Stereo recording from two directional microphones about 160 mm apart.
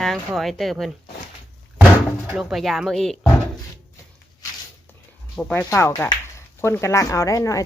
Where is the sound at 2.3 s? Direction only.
5° right (ahead or behind).